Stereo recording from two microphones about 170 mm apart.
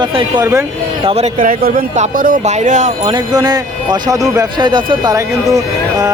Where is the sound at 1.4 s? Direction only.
60° right (ahead or behind).